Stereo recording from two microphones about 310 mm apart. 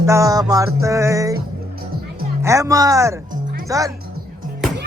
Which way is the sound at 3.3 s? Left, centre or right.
Right.